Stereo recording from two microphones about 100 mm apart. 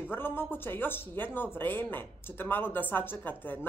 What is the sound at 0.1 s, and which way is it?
Speech, 20° left (ahead or behind).